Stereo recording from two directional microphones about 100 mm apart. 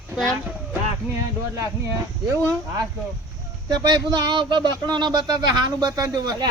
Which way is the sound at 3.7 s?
45° right (ahead or behind).